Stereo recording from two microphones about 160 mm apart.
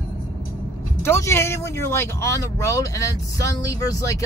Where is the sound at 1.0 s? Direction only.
15° left (ahead or behind).